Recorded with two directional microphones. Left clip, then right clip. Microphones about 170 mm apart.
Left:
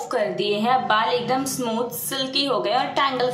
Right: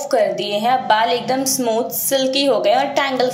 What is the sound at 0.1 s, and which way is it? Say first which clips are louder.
A woman's voice: right 6 dB; 10° right (ahead or behind).